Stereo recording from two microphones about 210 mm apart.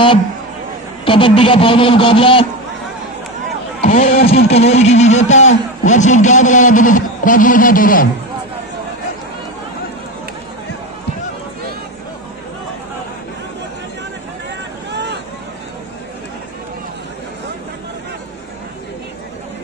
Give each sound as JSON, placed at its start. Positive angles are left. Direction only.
{"t": 1.0, "sound": "a man's voice", "side_deg": 25}
{"t": 3.8, "sound": "speech", "side_deg": 40}
{"t": 4.3, "sound": "a man's voice", "side_deg": 30}
{"t": 14.9, "sound": "vehicle", "side_deg": -55}